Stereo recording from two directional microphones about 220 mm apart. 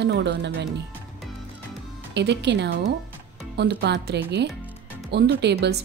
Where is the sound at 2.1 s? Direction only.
50° right (ahead or behind).